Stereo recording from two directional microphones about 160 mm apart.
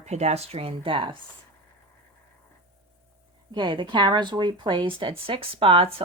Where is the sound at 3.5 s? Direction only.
30° right (ahead or behind).